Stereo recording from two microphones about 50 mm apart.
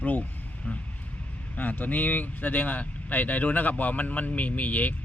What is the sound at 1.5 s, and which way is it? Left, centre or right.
Speech, left.